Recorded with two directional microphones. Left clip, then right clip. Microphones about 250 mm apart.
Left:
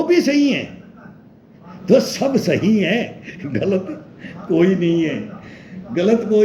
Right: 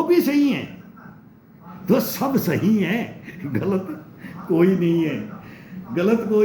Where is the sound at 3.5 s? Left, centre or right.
Centre.